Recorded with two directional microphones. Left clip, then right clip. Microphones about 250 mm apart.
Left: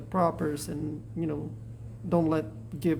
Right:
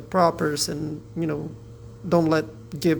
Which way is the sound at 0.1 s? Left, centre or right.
Centre.